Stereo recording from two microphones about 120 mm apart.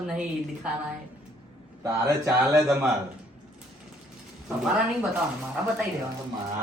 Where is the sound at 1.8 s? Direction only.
25° right (ahead or behind).